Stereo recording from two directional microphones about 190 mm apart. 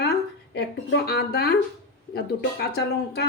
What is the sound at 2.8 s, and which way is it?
Speech, 60° left (ahead or behind).